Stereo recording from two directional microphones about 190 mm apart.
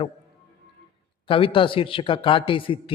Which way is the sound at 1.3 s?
30° left (ahead or behind).